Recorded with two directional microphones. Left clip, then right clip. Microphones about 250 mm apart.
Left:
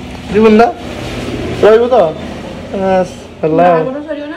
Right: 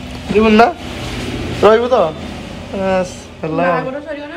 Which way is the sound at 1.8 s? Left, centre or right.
Centre.